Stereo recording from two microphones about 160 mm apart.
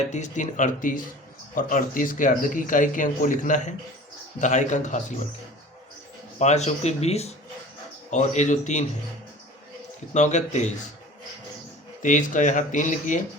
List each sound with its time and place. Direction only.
0.1 s speech: 50° left (ahead or behind)
6.4 s speech: 45° left (ahead or behind)
10.2 s speech: 50° left (ahead or behind)
12.0 s speech: 50° left (ahead or behind)